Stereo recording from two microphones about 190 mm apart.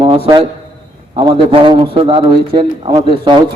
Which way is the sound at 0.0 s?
25° right (ahead or behind).